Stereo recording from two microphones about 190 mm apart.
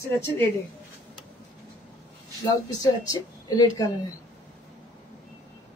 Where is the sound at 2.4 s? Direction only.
20° left (ahead or behind).